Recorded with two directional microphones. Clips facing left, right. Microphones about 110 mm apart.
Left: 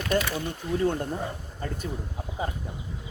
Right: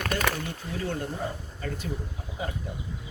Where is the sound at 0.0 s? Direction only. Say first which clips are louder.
Left 2 dB; 50° right (ahead or behind).